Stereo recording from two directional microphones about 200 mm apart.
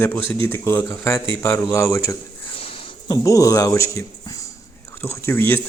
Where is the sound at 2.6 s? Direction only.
30° left (ahead or behind).